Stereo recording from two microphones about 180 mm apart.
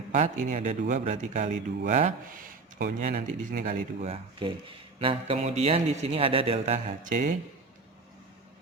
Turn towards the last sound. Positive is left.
turn(degrees=-45)  # may be behind; listen again after turning